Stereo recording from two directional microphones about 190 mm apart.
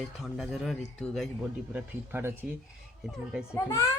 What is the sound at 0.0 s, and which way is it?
Speech, centre (ahead or behind).